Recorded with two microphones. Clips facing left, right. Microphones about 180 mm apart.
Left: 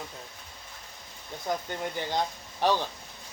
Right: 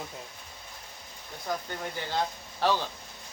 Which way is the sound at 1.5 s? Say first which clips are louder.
Left 2 dB; 20° left (ahead or behind).